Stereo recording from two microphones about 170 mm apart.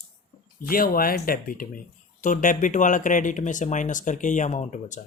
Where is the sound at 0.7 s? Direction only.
60° left (ahead or behind).